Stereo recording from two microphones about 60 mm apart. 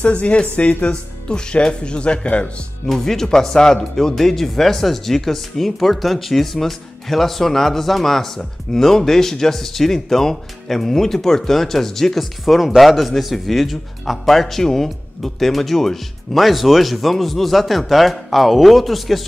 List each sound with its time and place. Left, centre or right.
0.0 s speech: left
2.9 s speech: centre